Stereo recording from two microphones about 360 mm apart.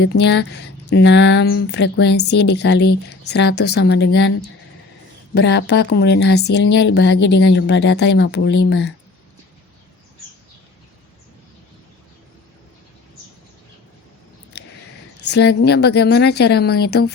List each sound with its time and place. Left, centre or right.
0.0 s a woman's voice: left
15.2 s a woman's voice: left